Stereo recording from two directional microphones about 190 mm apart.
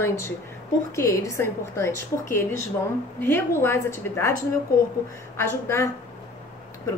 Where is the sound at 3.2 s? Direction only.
10° left (ahead or behind).